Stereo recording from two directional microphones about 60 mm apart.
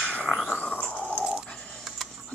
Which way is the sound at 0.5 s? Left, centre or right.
Left.